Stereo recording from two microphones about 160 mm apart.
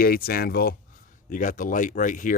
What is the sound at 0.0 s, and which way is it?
Speech, 65° left (ahead or behind).